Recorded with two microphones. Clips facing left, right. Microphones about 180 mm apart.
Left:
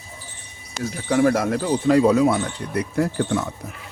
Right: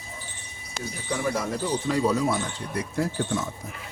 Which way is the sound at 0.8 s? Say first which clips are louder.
Left 10 dB; 70° left (ahead or behind).